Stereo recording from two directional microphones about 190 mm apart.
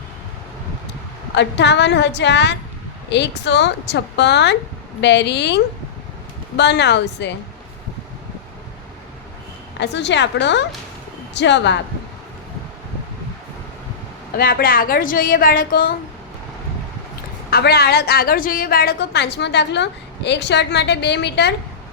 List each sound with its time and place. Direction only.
1.4 s a woman's voice: 65° left (ahead or behind)
6.6 s a woman's voice: 65° left (ahead or behind)
9.8 s a woman's voice: 65° left (ahead or behind)
14.3 s a woman's voice: 50° left (ahead or behind)
17.5 s a woman's voice: 60° left (ahead or behind)